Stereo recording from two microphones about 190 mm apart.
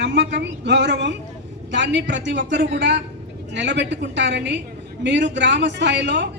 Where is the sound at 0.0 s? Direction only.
70° right (ahead or behind).